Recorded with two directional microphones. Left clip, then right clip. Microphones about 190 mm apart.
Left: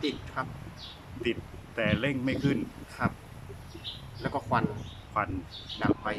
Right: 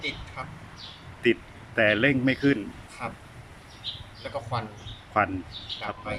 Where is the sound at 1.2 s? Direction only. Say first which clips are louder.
Right 8 dB; centre (ahead or behind).